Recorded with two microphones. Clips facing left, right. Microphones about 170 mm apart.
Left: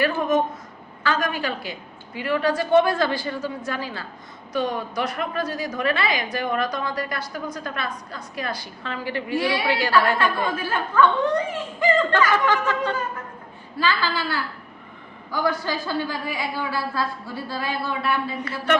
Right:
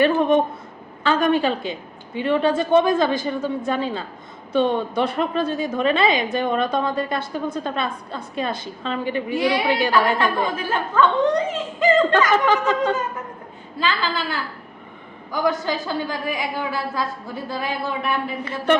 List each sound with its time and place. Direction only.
0.0 s a woman's voice: 25° right (ahead or behind)